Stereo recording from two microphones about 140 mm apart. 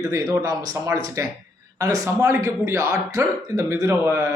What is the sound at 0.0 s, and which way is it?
Speech, 25° right (ahead or behind).